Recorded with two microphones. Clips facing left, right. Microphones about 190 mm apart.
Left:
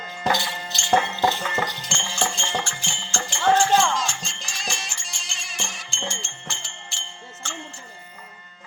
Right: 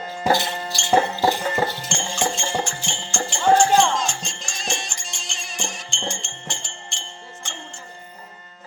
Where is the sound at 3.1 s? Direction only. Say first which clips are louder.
Right 3 dB; 15° right (ahead or behind).